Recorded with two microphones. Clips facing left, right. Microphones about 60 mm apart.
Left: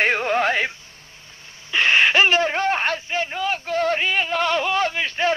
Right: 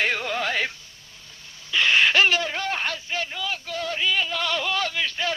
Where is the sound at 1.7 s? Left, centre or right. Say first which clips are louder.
Left 2 dB; left.